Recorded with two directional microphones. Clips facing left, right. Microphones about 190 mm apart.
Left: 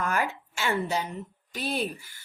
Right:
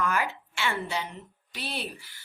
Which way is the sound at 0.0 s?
45° left (ahead or behind).